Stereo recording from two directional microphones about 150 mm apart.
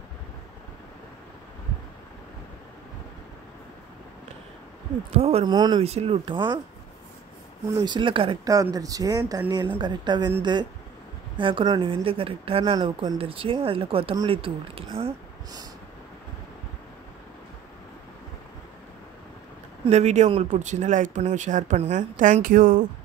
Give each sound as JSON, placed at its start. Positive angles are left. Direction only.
{"t": 5.1, "sound": "speech", "side_deg": -45}
{"t": 5.4, "sound": "speech", "side_deg": -30}
{"t": 5.8, "sound": "speech", "side_deg": -45}
{"t": 7.8, "sound": "speech", "side_deg": -30}
{"t": 8.5, "sound": "speech", "side_deg": -25}
{"t": 12.7, "sound": "speech", "side_deg": -30}
{"t": 19.9, "sound": "speech", "side_deg": -50}